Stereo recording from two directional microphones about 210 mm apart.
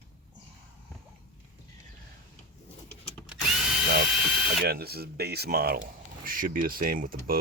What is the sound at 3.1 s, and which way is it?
Drill, centre (ahead or behind).